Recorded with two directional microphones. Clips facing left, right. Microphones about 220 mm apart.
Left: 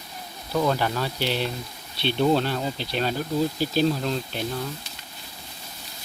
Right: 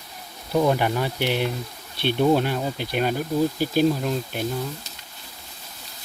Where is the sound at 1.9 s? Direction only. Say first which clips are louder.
Right 2 dB; 50° right (ahead or behind).